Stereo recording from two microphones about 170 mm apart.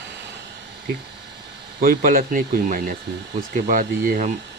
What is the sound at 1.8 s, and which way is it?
Speech, 60° right (ahead or behind).